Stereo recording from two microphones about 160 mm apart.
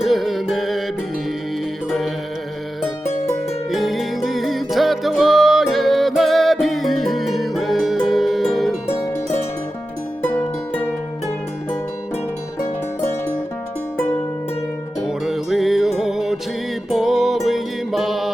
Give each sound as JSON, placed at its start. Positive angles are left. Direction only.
{"t": 0.0, "sound": "music", "side_deg": 0}
{"t": 1.9, "sound": "music", "side_deg": 0}
{"t": 3.7, "sound": "music", "side_deg": 0}
{"t": 10.2, "sound": "music", "side_deg": 15}
{"t": 12.5, "sound": "music", "side_deg": 15}
{"t": 15.0, "sound": "music", "side_deg": -5}